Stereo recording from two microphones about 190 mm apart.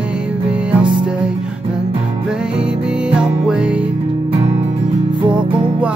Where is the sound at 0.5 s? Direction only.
5° right (ahead or behind).